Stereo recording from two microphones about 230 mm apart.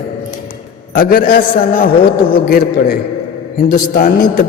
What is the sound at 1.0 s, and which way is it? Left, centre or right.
A man's voice, left.